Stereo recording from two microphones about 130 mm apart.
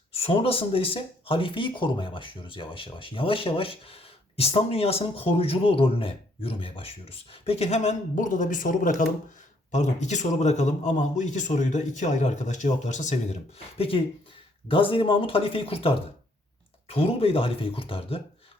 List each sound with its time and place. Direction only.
0.1 s speech: 50° left (ahead or behind); by 9.0 s 90° left
9.7 s a man's voice: 65° left (ahead or behind)
13.7 s speech: 45° left (ahead or behind)
16.9 s speech: 50° left (ahead or behind)